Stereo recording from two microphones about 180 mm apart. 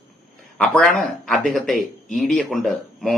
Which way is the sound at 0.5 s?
5° left (ahead or behind).